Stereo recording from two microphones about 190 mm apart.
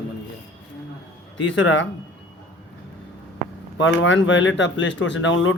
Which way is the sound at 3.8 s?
85° left.